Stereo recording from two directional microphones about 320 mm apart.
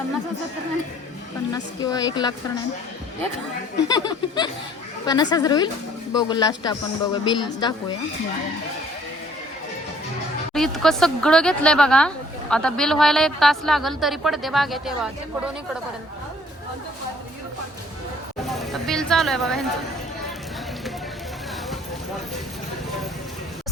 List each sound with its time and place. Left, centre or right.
1.5 s speech: centre
3.8 s speech: centre
10.5 s speech: centre
18.4 s speech: centre